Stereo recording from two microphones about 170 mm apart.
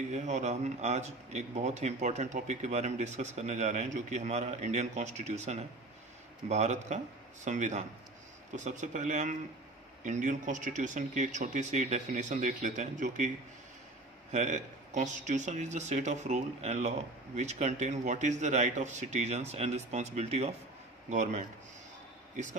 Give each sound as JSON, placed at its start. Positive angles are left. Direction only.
{"t": 0.1, "sound": "a man's voice", "side_deg": -45}
{"t": 14.3, "sound": "a man's voice", "side_deg": -45}